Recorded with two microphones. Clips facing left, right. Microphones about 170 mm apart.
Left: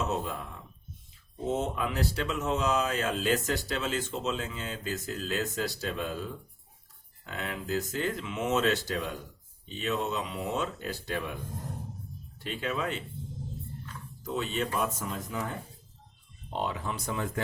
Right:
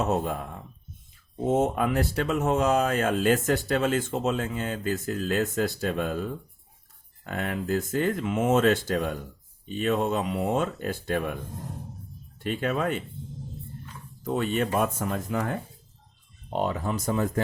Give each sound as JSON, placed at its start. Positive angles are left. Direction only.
{"t": 0.0, "sound": "speech", "side_deg": -55}
{"t": 12.4, "sound": "speech", "side_deg": -50}
{"t": 14.3, "sound": "speech", "side_deg": -55}
{"t": 16.5, "sound": "speech", "side_deg": -45}